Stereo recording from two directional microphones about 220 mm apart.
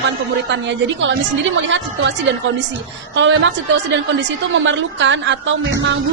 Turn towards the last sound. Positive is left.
turn(degrees=-60)  # may be behind; listen again after turning